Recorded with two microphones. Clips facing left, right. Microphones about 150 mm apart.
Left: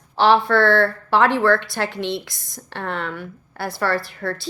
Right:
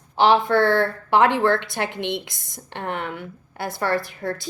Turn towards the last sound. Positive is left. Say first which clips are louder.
# even
turn(degrees=-20)  # may be behind; listen again after turning